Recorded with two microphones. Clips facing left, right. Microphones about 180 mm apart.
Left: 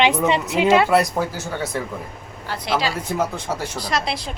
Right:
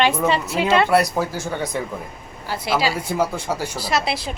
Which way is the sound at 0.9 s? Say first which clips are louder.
Even; centre (ahead or behind).